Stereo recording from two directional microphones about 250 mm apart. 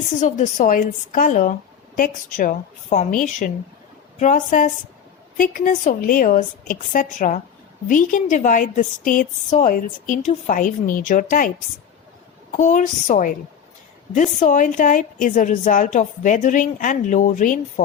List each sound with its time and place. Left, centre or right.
0.2 s a woman's voice: left